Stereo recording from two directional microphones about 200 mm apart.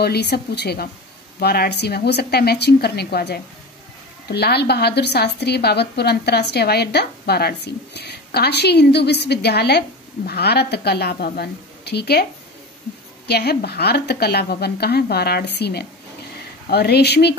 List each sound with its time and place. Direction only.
0.0 s a woman's voice: 55° left (ahead or behind)
13.3 s a woman's voice: 55° left (ahead or behind)